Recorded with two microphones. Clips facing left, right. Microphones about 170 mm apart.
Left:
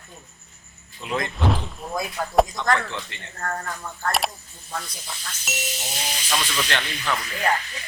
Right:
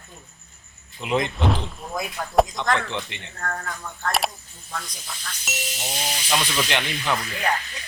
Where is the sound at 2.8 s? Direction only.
20° right (ahead or behind).